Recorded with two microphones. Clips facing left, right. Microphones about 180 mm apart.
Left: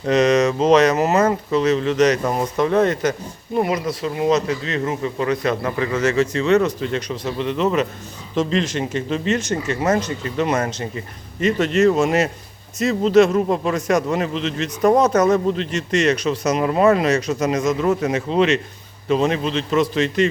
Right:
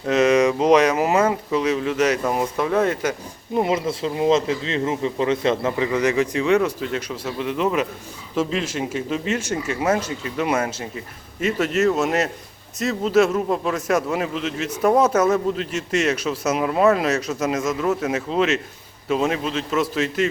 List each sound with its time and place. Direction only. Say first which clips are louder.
0.0 s speech: left 1 dB; 5° right (ahead or behind)
3.6 s a man's voice: even; 25° right (ahead or behind); by 20.3 s 5° right (ahead or behind)